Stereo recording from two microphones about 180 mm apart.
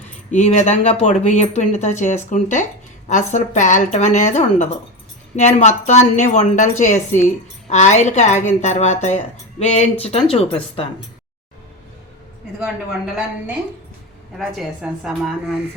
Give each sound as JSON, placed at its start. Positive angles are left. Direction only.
{"t": 0.3, "sound": "a woman's voice", "side_deg": 45}
{"t": 14.3, "sound": "a woman's voice", "side_deg": 0}